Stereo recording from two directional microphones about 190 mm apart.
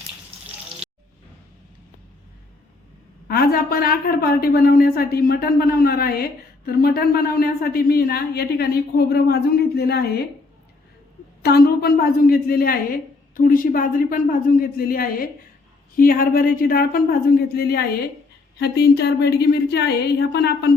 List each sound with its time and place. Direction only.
3.2 s a woman's voice: 55° left (ahead or behind)
11.4 s a woman's voice: 55° left (ahead or behind)